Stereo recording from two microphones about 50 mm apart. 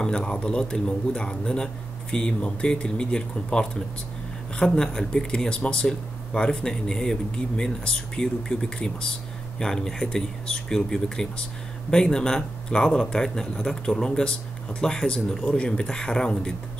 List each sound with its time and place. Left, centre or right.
0.0 s speech: centre